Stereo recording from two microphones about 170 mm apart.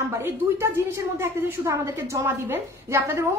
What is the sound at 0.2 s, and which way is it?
Speech, 15° right (ahead or behind).